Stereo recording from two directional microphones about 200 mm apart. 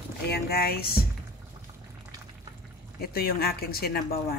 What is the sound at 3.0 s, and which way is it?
A woman's voice, 50° left (ahead or behind).